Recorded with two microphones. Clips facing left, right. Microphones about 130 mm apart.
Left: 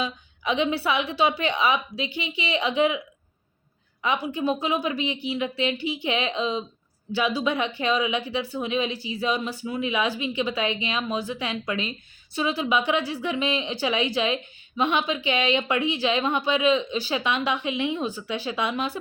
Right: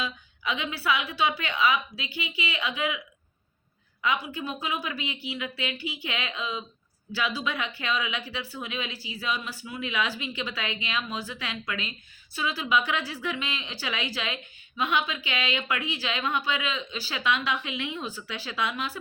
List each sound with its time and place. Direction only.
0.0 s speech: 25° left (ahead or behind)
4.0 s speech: 25° left (ahead or behind)